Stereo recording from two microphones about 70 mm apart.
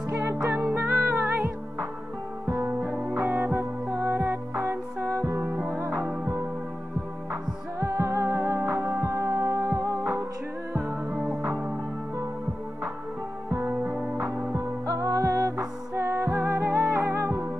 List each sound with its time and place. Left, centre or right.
0.1 s music: right
0.5 s music: right
2.8 s music: centre
3.2 s music: right
7.8 s music: right
10.7 s music: right
11.1 s music: centre
13.9 s music: centre
14.9 s music: right
15.5 s music: right